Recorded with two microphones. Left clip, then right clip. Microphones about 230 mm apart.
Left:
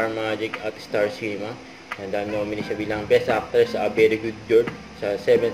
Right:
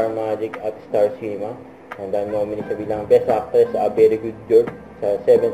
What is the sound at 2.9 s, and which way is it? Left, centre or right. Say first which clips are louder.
Speech: right 4 dB; left.